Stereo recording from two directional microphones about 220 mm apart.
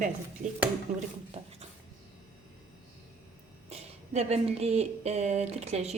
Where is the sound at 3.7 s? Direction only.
30° right (ahead or behind).